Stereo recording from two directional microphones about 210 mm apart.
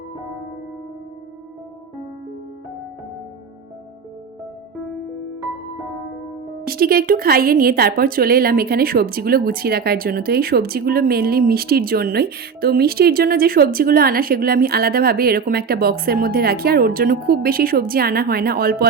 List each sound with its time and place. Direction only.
6.7 s a woman's voice: 45° right (ahead or behind)